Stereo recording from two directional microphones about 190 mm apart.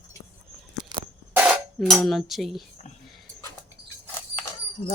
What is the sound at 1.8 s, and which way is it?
Speech, centre (ahead or behind).